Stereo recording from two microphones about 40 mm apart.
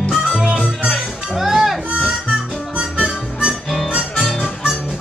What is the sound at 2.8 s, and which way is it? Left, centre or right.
Music, right.